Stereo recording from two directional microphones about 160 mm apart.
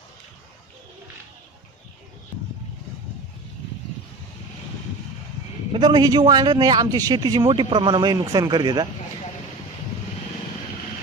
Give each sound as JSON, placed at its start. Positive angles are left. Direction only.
{"t": 5.7, "sound": "a man's voice", "side_deg": -30}